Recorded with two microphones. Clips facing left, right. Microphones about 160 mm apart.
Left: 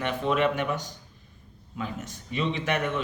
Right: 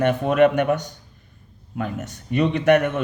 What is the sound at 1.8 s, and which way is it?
A man's voice, 55° right (ahead or behind).